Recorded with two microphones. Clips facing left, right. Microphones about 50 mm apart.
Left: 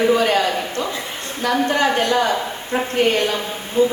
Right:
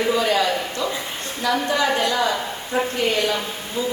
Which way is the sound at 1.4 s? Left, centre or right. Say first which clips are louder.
Left 3 dB; left.